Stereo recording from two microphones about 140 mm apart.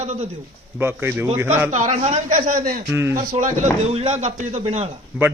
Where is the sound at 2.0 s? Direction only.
50° right (ahead or behind).